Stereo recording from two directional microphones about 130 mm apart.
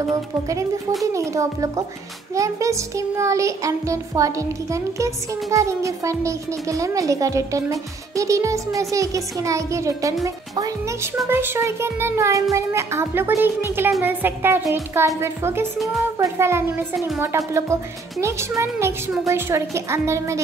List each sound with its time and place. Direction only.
0.1 s music: 25° right (ahead or behind)
18.6 s music: 20° right (ahead or behind)